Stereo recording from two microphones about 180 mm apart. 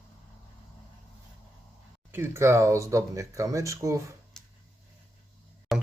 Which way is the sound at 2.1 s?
15° right (ahead or behind).